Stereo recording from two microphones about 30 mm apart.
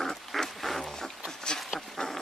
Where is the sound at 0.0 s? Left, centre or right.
Centre.